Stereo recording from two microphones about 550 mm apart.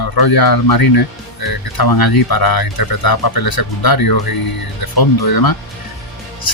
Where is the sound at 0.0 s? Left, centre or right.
Left.